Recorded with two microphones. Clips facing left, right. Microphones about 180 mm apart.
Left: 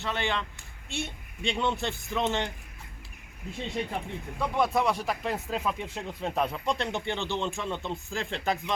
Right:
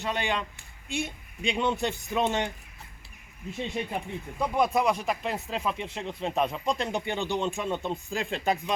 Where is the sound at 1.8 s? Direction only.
15° right (ahead or behind).